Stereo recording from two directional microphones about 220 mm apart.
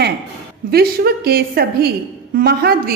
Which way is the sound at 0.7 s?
45° right (ahead or behind).